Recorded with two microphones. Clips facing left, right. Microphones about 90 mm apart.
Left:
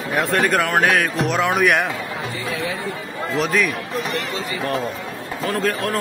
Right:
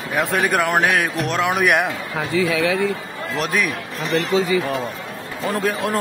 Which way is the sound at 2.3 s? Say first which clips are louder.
Right 10 dB; 90° right.